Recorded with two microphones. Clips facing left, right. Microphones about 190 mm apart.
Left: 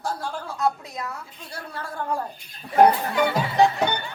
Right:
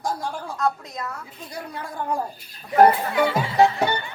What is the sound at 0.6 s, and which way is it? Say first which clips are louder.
Speech: even; 10° left (ahead or behind).